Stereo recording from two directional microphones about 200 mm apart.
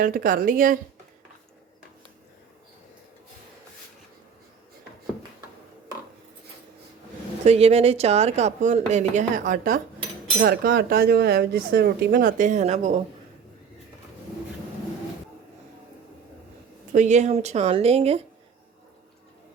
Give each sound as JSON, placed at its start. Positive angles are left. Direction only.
{"t": 0.0, "sound": "speech", "side_deg": -45}
{"t": 7.4, "sound": "speech", "side_deg": -30}
{"t": 16.9, "sound": "speech", "side_deg": -35}